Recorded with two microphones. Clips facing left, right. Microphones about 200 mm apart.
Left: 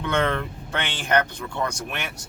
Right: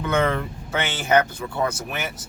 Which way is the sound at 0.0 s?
5° right (ahead or behind).